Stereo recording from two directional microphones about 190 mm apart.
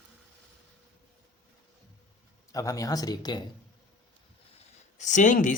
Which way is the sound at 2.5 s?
15° left (ahead or behind).